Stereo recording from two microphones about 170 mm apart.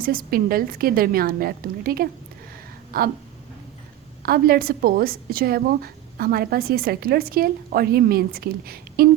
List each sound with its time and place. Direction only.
0.0 s a woman's voice: 55° right (ahead or behind)
4.2 s a woman's voice: 60° right (ahead or behind)